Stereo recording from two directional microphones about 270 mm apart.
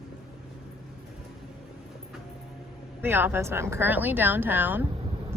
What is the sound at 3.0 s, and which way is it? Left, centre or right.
A woman's voice, centre.